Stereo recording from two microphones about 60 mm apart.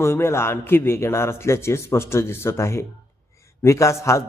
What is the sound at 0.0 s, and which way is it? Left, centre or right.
A man's voice, left.